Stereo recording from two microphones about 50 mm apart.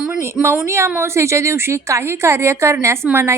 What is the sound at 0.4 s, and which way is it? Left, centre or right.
A woman's voice, right.